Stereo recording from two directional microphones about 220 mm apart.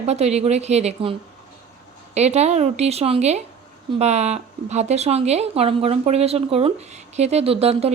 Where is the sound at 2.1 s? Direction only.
30° right (ahead or behind).